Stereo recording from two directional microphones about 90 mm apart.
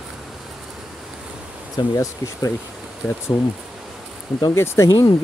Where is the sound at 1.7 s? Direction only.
35° left (ahead or behind).